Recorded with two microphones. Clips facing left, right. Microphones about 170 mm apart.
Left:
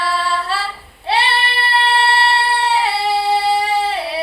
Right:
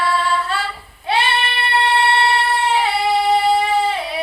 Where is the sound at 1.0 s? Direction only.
35° left (ahead or behind).